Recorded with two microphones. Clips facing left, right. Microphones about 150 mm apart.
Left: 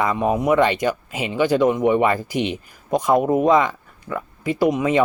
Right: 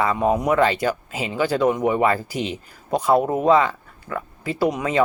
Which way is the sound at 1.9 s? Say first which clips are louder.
Left 2 dB; 15° left (ahead or behind).